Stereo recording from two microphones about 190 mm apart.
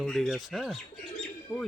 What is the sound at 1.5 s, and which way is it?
Speech, 15° left (ahead or behind).